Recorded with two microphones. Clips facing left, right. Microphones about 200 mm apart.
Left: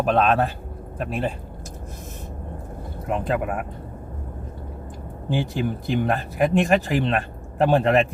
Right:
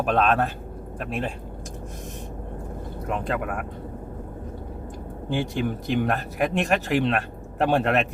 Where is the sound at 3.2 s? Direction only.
Centre (ahead or behind).